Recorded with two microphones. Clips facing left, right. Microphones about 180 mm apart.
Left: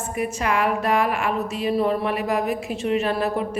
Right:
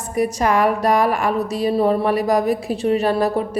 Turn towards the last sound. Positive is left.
turn(degrees=-35)  # may be behind; listen again after turning